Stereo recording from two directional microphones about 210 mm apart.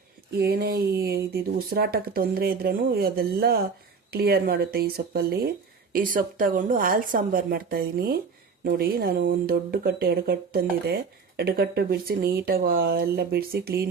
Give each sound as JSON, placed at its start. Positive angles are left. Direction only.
{"t": 0.3, "sound": "speech", "side_deg": -45}